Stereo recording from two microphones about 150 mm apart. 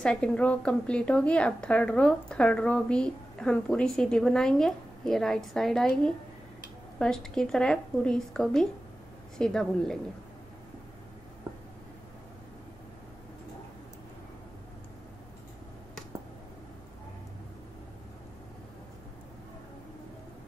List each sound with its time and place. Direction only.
0.0 s a woman's voice: 5° left (ahead or behind)